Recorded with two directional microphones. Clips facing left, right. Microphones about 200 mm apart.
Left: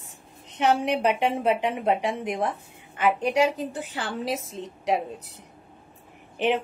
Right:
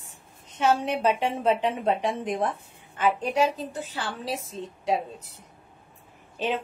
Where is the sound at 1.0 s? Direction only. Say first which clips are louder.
Left 1 dB; 15° left (ahead or behind).